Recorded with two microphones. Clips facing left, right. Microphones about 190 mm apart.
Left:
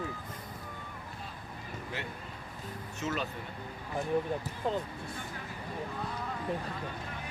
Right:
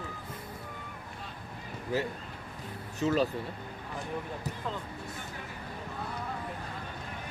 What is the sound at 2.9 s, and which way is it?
Speech, 35° right (ahead or behind).